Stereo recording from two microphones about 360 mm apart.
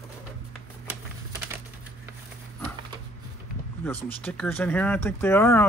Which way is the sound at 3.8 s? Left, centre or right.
Centre.